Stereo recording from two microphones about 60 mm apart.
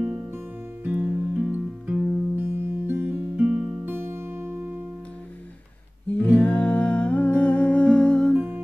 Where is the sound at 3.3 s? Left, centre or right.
Centre.